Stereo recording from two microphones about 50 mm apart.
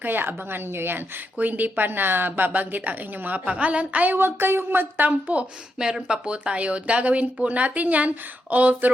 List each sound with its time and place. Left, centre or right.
0.0 s speech: right
1.4 s speech: right
3.4 s speech: right
4.1 s speech: right
5.8 s speech: centre; by 8.9 s right